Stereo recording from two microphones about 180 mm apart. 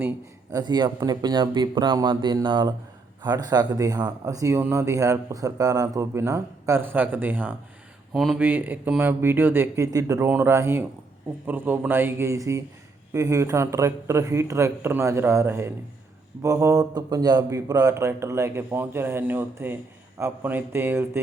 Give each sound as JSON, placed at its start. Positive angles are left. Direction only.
{"t": 0.5, "sound": "speech", "side_deg": -25}
{"t": 8.1, "sound": "speech", "side_deg": 0}
{"t": 8.4, "sound": "speech", "side_deg": -10}